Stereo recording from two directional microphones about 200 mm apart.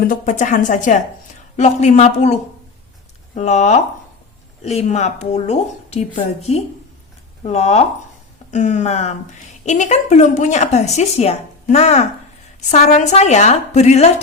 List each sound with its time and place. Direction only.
0.0 s a woman's voice: 45° left (ahead or behind)